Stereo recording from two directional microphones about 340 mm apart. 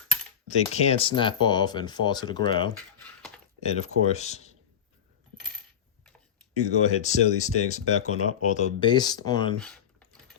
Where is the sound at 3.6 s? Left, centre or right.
Centre.